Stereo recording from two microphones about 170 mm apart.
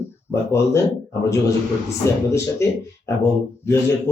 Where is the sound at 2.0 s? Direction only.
15° left (ahead or behind).